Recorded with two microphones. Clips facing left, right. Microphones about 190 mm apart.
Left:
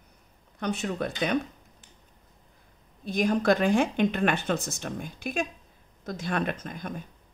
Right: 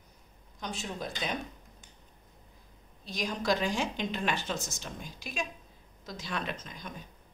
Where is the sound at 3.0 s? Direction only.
55° left (ahead or behind).